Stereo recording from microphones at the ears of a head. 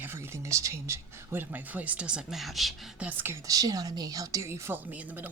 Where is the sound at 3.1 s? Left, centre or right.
Right.